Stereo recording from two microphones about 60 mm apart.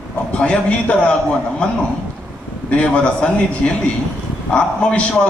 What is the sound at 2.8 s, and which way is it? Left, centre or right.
A man's voice, centre.